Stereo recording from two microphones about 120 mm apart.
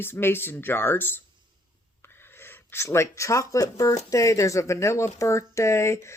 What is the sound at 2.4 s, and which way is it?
Speech, 20° left (ahead or behind).